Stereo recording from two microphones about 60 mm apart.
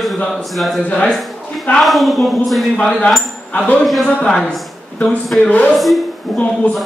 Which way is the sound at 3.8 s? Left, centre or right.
Centre.